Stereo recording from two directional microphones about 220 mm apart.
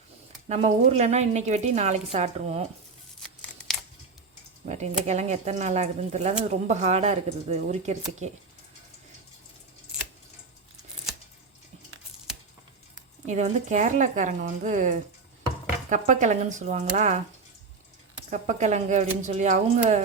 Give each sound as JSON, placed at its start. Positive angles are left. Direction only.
{"t": 0.4, "sound": "a woman's voice", "side_deg": -30}
{"t": 4.6, "sound": "a woman's voice", "side_deg": -30}
{"t": 13.2, "sound": "a woman's voice", "side_deg": -30}
{"t": 18.3, "sound": "a woman's voice", "side_deg": -35}